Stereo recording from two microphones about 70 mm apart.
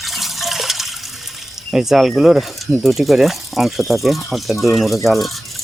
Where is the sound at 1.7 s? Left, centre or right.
Centre.